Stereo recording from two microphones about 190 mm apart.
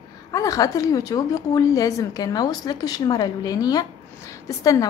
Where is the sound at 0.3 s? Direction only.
20° left (ahead or behind).